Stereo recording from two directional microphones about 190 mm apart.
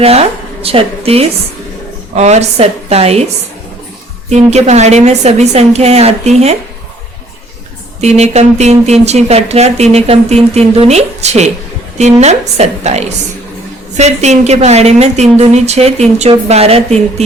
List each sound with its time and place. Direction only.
0.0 s speech: 30° right (ahead or behind)
4.3 s speech: 35° right (ahead or behind)
8.0 s speech: 35° right (ahead or behind)